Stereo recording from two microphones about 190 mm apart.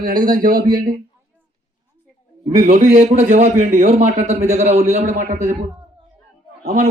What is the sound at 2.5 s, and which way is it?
A man's voice, 45° right (ahead or behind).